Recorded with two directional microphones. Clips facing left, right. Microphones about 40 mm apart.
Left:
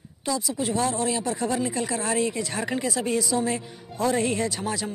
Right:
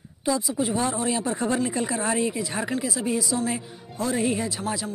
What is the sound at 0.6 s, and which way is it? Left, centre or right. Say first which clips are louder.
Speech: even; centre.